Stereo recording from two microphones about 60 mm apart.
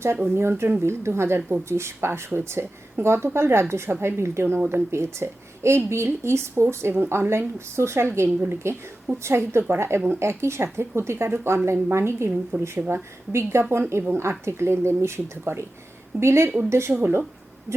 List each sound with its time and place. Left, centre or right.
0.0 s a woman's voice: right
12.3 s speech: right
12.9 s a woman's voice: right